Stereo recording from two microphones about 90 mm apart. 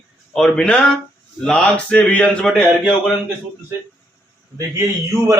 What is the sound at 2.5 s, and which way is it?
Speech, 5° left (ahead or behind).